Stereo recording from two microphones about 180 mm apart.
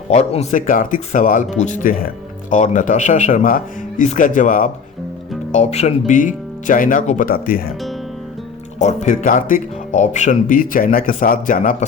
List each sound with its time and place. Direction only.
0.1 s speech: 35° left (ahead or behind); by 7.7 s 55° left (ahead or behind)
8.8 s speech: 40° left (ahead or behind)